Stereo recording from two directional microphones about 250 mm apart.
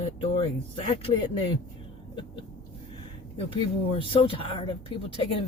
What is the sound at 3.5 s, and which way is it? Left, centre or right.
Speech, left.